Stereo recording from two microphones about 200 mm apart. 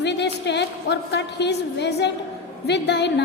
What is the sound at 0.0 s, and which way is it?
A woman's voice, 60° left (ahead or behind).